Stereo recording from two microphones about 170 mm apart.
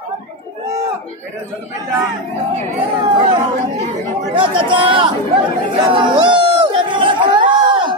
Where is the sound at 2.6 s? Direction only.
30° right (ahead or behind).